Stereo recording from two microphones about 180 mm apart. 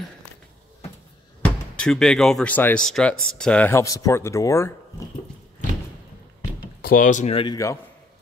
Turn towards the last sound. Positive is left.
turn(degrees=20)  # may be behind; listen again after turning